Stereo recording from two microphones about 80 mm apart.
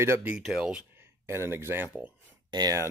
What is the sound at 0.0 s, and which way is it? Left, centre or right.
Speech, right.